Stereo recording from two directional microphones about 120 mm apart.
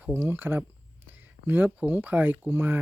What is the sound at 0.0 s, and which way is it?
Speech, 15° right (ahead or behind).